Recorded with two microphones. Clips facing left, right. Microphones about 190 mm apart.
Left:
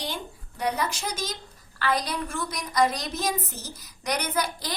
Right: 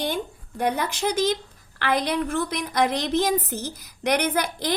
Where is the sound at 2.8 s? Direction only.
60° right (ahead or behind).